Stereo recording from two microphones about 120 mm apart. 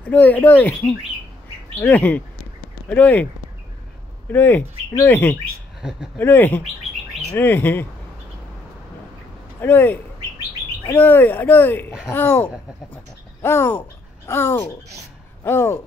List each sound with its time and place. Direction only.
0.1 s speech: 15° left (ahead or behind)
1.8 s speech: 10° left (ahead or behind)
4.3 s speech: 15° left (ahead or behind)
5.8 s speech: 5° right (ahead or behind)
6.1 s speech: 15° left (ahead or behind)
9.6 s speech: 15° left (ahead or behind)